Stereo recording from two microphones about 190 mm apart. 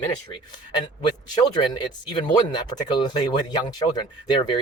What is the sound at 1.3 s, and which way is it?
Speech, 25° left (ahead or behind).